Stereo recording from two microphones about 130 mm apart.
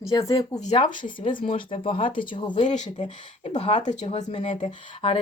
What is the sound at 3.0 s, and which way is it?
Speech, 60° left (ahead or behind).